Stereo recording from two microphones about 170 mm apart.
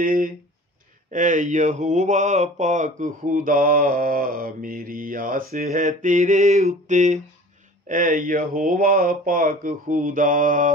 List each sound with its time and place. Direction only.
0.0 s speech: 55° right (ahead or behind)
1.1 s mantra: 50° right (ahead or behind)